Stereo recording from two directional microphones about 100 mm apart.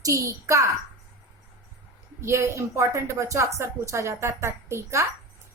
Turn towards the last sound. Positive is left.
turn(degrees=-30)  # may be behind; listen again after turning